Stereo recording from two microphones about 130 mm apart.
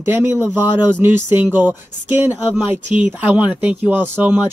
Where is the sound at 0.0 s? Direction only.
20° right (ahead or behind).